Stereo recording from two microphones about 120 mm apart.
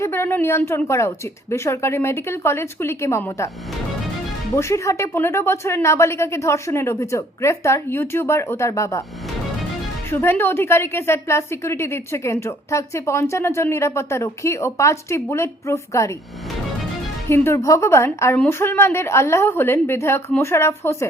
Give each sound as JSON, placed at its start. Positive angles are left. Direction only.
{"t": 0.0, "sound": "a woman's voice", "side_deg": 20}
{"t": 4.5, "sound": "a woman's voice", "side_deg": 25}
{"t": 10.1, "sound": "a woman's voice", "side_deg": 20}
{"t": 17.2, "sound": "a woman's voice", "side_deg": 20}